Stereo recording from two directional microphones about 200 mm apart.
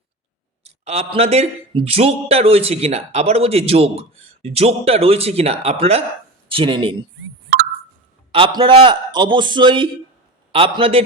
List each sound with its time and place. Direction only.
0.6 s a man's voice: 30° right (ahead or behind)
8.3 s a man's voice: 25° right (ahead or behind)